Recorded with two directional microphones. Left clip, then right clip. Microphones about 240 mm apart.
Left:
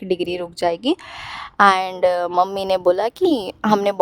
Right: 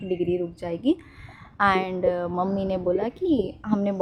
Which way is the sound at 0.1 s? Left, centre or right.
Left.